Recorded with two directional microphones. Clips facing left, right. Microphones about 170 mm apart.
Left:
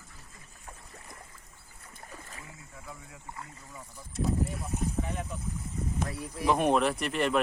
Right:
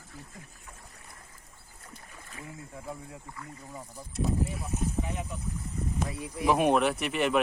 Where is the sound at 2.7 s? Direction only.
30° right (ahead or behind).